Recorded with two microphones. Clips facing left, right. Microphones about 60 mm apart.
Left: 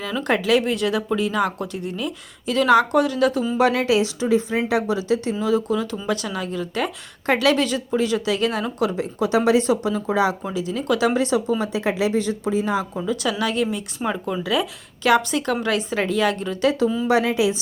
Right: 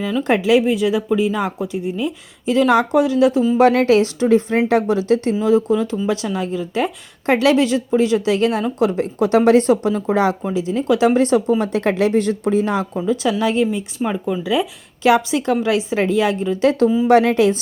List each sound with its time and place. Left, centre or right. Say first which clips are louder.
0.2 s speech: right 4 dB; centre
3.6 s speech: right 5 dB; right
11.6 s speech: right 4 dB; right
13.4 s speech: right 5 dB; right
14.0 s speech: right 3 dB; centre
14.5 s speech: right 3 dB; right
17.1 s speech: right 6 dB; right